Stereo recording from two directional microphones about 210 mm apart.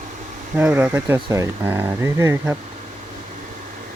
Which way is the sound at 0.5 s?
5° right (ahead or behind).